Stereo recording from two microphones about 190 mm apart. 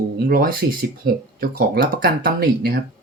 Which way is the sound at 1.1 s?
50° right (ahead or behind).